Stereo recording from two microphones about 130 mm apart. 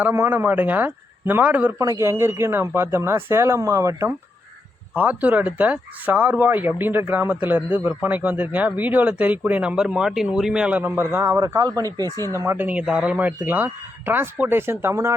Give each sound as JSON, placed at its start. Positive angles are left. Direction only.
{"t": 0.0, "sound": "speech", "side_deg": -15}
{"t": 1.8, "sound": "speech", "side_deg": -25}
{"t": 4.9, "sound": "speech", "side_deg": -10}
{"t": 12.1, "sound": "speech", "side_deg": 25}
{"t": 12.4, "sound": "speech", "side_deg": -15}